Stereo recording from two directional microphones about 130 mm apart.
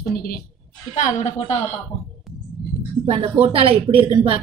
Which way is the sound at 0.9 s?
55° left (ahead or behind).